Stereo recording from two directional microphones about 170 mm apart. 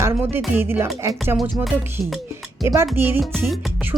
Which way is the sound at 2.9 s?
15° right (ahead or behind).